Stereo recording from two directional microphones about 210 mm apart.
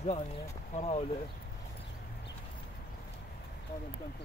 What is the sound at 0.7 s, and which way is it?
Speech, 30° left (ahead or behind).